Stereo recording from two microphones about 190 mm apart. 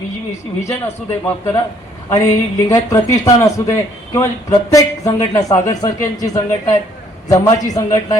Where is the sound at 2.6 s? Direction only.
15° left (ahead or behind).